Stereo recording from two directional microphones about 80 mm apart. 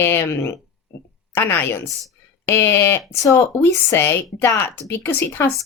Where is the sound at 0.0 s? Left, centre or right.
Left.